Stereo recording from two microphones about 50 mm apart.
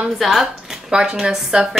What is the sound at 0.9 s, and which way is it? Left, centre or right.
Speech, centre.